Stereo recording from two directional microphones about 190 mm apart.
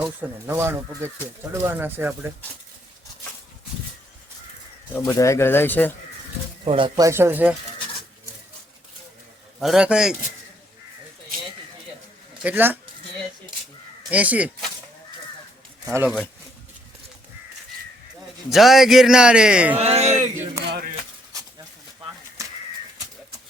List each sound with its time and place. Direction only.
0.2 s speech: 10° right (ahead or behind)
4.9 s speech: 15° left (ahead or behind)
6.7 s speech: 25° right (ahead or behind); by 7.5 s 10° right (ahead or behind)
9.6 s a man's voice: centre (ahead or behind)
12.4 s speech: 10° right (ahead or behind)
14.1 s speech: 10° right (ahead or behind)
16.0 s a man's voice: 5° right (ahead or behind)
18.5 s a man's voice: centre (ahead or behind)
19.7 s a sound: 35° right (ahead or behind)
20.7 s a sound: 60° right (ahead or behind)
22.4 s bird: 15° right (ahead or behind)